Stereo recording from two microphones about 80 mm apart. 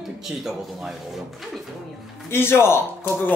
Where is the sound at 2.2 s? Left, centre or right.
Left.